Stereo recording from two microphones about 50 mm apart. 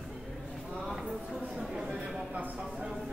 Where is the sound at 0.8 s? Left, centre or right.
Centre.